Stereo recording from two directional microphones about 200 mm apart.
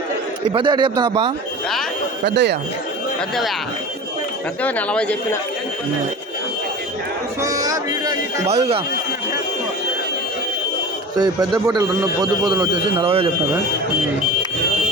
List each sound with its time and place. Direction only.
0.5 s a man's voice: 25° right (ahead or behind)
2.2 s speech: 55° right (ahead or behind)
4.6 s speech: 5° left (ahead or behind)
7.4 s music: 15° right (ahead or behind)
8.4 s a man's voice: 30° right (ahead or behind)
11.2 s a man's voice: 20° right (ahead or behind)